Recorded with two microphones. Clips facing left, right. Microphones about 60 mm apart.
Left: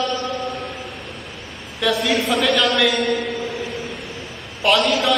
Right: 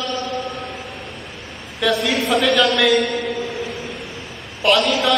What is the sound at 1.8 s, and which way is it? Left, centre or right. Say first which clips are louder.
Mantra: even; centre.